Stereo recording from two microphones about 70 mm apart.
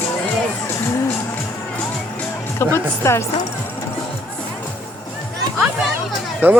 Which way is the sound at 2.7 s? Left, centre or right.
Left.